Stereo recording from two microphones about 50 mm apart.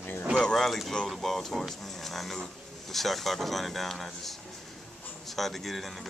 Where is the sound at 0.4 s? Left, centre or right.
Centre.